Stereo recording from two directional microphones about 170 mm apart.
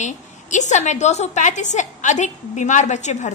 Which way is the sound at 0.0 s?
45° left (ahead or behind).